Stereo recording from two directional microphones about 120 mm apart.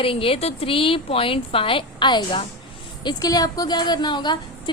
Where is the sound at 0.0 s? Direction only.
50° left (ahead or behind).